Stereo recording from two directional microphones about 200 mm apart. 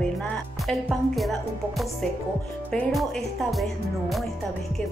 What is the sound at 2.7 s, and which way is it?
A woman's voice, centre (ahead or behind).